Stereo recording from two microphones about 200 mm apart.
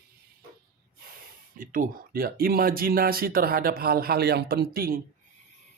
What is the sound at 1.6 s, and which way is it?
Speech, 45° right (ahead or behind).